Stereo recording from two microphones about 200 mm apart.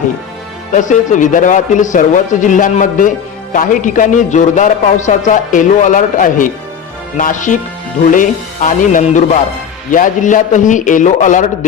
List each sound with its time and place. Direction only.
0.7 s a man's voice: 40° left (ahead or behind)